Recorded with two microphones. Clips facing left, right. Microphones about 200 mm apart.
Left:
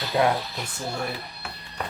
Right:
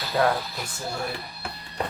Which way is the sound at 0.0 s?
20° left (ahead or behind).